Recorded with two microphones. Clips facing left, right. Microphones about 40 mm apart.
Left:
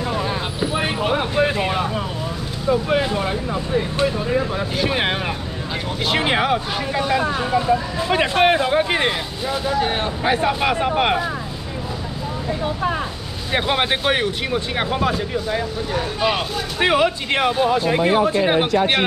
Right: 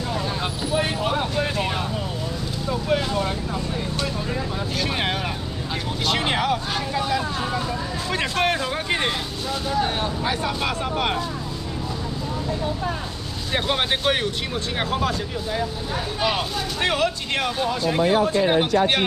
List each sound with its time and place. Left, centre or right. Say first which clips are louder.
0.1 s vehicle: left 3 dB; left
2.7 s speech: left 5 dB; centre
13.5 s speech: left 3 dB; centre
16.8 s speech: left 6 dB; centre